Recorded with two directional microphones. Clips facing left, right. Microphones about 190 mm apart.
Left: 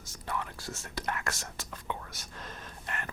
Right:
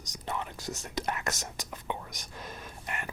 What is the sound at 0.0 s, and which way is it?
Speech, 20° right (ahead or behind).